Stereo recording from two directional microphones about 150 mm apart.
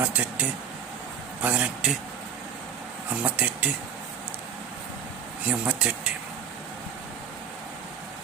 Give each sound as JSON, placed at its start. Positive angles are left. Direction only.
{"t": 0.0, "sound": "speech", "side_deg": -10}
{"t": 3.1, "sound": "speech", "side_deg": -10}
{"t": 5.5, "sound": "speech", "side_deg": -5}